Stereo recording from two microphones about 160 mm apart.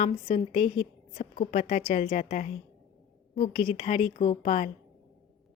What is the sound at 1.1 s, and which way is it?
A woman's voice, 55° left (ahead or behind).